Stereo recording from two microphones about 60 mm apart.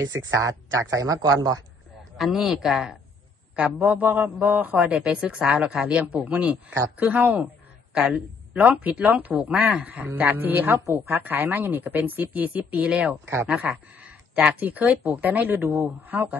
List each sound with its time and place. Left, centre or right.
0.0 s a man's voice: right
2.1 s speech: centre
3.7 s speech: right
7.9 s a woman's voice: centre
13.2 s speech: right
13.5 s speech: right